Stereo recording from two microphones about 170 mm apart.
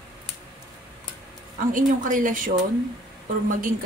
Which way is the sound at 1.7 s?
50° right (ahead or behind).